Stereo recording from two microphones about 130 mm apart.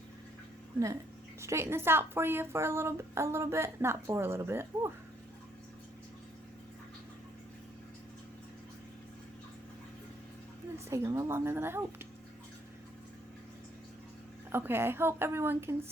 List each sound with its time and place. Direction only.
1.4 s a woman's voice: 20° right (ahead or behind)
10.8 s a woman's voice: 25° right (ahead or behind)
14.5 s a woman's voice: 15° right (ahead or behind)